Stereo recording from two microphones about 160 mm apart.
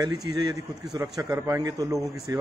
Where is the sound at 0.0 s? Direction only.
25° right (ahead or behind).